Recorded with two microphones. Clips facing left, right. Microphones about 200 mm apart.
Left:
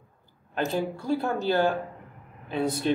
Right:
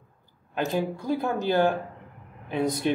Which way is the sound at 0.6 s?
15° right (ahead or behind).